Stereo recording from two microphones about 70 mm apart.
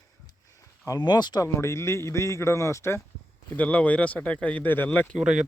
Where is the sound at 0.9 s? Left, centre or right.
Left.